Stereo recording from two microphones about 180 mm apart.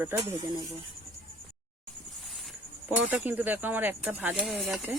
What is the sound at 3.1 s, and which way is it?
Speech, 10° right (ahead or behind).